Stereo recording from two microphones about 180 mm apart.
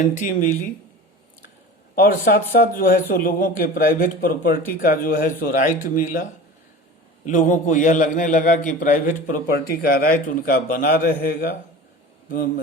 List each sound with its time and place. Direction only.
0.0 s a man's voice: 45° left (ahead or behind)
2.0 s a man's voice: 55° left (ahead or behind)
7.3 s a man's voice: 45° left (ahead or behind)